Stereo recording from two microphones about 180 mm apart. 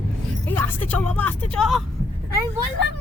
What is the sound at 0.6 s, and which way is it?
Speech, 10° left (ahead or behind).